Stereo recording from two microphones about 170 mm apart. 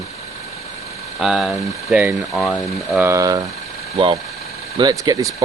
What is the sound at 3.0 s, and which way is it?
Speech, 20° right (ahead or behind).